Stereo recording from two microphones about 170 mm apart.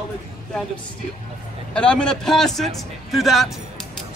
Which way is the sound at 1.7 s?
5° left (ahead or behind).